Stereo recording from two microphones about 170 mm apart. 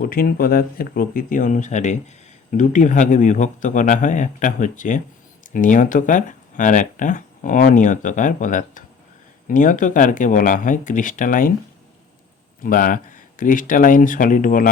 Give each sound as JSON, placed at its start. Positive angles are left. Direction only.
{"t": 0.0, "sound": "speech", "side_deg": 60}
{"t": 12.6, "sound": "speech", "side_deg": 55}